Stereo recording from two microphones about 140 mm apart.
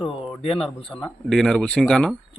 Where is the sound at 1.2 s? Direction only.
Centre (ahead or behind).